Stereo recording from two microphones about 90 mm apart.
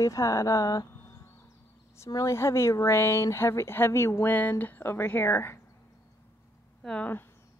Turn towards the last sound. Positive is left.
turn(degrees=10)  # may be behind; listen again after turning